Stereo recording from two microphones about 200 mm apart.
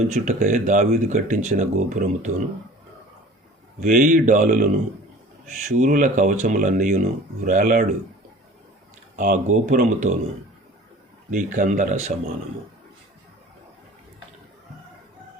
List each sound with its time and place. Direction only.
0.0 s speech: 35° right (ahead or behind)
3.8 s speech: 40° right (ahead or behind)
9.1 s speech: 40° right (ahead or behind)
11.3 s speech: 40° right (ahead or behind)